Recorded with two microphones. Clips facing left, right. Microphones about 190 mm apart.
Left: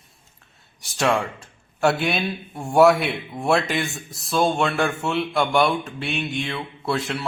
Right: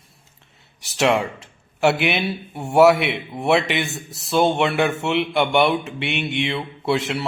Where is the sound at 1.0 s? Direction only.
20° right (ahead or behind).